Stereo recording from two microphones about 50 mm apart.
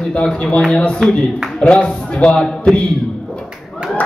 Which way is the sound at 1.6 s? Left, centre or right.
Left.